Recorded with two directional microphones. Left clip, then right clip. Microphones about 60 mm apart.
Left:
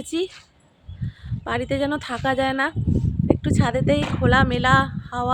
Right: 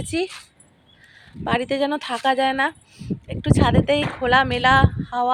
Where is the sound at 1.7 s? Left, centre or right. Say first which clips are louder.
Right 2 dB; left.